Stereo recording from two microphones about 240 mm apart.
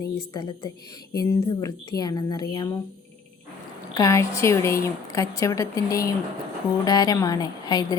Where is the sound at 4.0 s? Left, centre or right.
Centre.